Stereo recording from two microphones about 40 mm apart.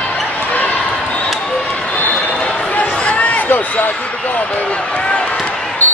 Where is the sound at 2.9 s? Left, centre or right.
Left.